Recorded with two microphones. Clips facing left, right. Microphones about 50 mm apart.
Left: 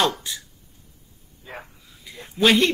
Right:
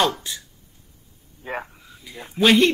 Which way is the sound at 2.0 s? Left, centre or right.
Centre.